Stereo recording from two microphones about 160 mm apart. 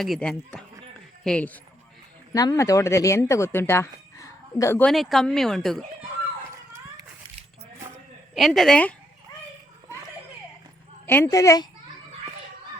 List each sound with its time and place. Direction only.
0.0 s speech: 5° left (ahead or behind)
2.3 s speech: 20° left (ahead or behind)
4.8 s speech: centre (ahead or behind)
8.4 s speech: centre (ahead or behind)
11.0 s a woman's voice: 15° left (ahead or behind)